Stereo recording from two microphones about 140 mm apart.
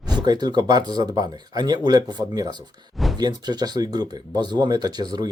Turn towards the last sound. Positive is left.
turn(degrees=-30)  # may be behind; listen again after turning